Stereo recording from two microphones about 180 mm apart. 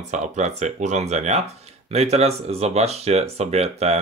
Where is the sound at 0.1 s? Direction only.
40° right (ahead or behind).